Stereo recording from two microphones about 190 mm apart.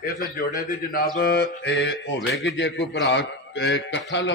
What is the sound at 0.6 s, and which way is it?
Speech, 45° left (ahead or behind).